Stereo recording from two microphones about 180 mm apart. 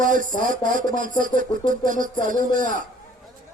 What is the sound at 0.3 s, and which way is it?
Speech, 45° right (ahead or behind).